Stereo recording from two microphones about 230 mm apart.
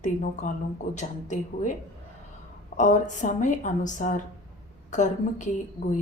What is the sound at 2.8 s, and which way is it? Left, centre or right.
A woman's voice, left.